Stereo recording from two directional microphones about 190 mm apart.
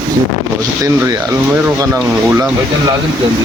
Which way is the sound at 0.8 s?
15° right (ahead or behind).